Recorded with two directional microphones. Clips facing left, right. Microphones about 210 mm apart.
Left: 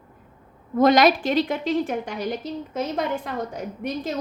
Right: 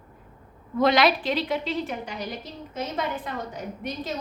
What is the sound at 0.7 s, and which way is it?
A woman's voice, 45° left (ahead or behind).